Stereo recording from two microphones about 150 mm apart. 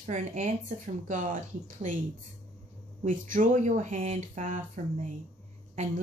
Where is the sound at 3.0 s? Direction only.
60° right (ahead or behind).